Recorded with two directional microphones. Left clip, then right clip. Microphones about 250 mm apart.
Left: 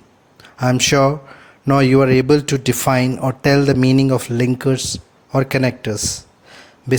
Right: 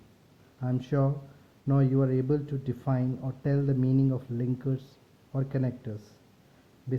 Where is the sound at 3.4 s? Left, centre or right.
Left.